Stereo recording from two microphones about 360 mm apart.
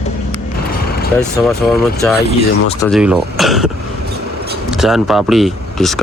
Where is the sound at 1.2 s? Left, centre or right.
Centre.